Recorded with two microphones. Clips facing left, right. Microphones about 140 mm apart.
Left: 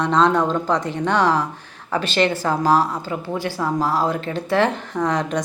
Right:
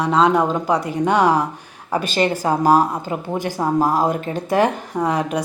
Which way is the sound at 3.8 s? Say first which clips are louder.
Right 2 dB; 15° right (ahead or behind).